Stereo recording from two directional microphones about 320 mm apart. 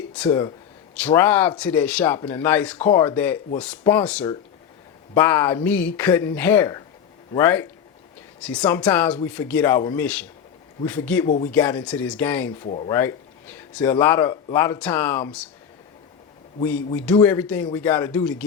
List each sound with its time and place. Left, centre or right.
0.3 s speech: centre
12.6 s speech: centre
12.9 s speech: centre
16.6 s speech: centre